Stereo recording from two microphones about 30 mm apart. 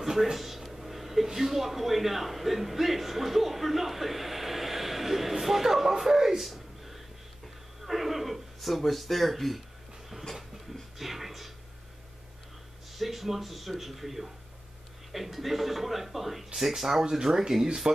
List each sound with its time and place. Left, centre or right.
0.0 s speech: centre
6.4 s a sound: centre
8.8 s a man's voice: centre
11.0 s music: centre
12.9 s a man's voice: centre
17.1 s speech: right